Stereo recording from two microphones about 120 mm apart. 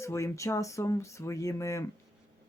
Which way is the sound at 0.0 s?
25° left (ahead or behind).